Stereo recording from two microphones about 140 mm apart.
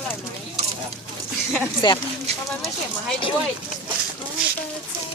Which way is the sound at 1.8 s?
35° left (ahead or behind).